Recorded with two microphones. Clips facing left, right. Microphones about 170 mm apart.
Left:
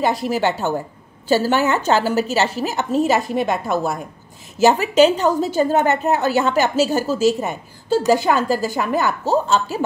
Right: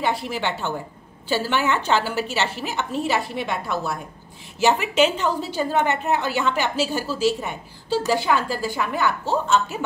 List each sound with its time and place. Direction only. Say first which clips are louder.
0.0 s a woman's voice: left 6 dB; 40° left (ahead or behind)